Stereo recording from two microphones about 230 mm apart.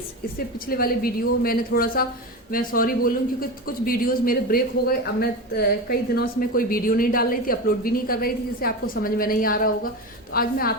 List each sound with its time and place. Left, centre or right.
0.3 s a man's voice: left